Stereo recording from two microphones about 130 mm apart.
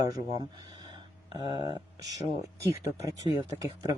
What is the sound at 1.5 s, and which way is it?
Speech, 35° right (ahead or behind).